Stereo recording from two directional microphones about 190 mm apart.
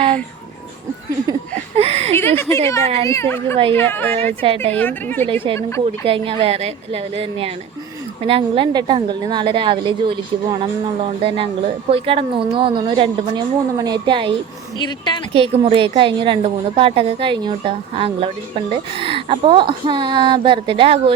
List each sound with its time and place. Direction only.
1.3 s a sound: 30° right (ahead or behind)
2.1 s speech: 10° left (ahead or behind)
4.4 s a woman's voice: 30° right (ahead or behind)
4.7 s speech: 10° left (ahead or behind)
5.2 s a woman's voice: 30° right (ahead or behind)
14.8 s a woman's voice: 25° left (ahead or behind)
15.3 s a woman's voice: 30° right (ahead or behind)